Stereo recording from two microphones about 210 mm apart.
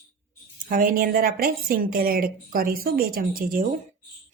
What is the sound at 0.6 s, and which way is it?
A woman's voice, 40° right (ahead or behind).